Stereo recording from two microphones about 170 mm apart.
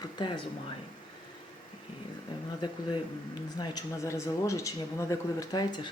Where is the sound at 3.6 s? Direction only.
20° left (ahead or behind).